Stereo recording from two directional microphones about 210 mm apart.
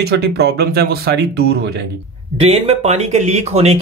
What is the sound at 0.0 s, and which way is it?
Speech, 50° right (ahead or behind).